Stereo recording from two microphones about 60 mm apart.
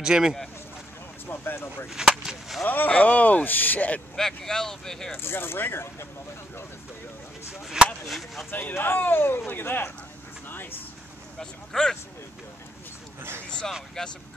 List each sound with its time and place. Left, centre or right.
0.0 s speech: centre
1.2 s a sound: left
1.9 s speech: centre
2.6 s speech: left
4.2 s speech: centre
5.1 s speech: left
7.8 s speech: centre
8.1 s speech: centre
8.5 s speech: left
11.3 s speech: centre
13.4 s speech: centre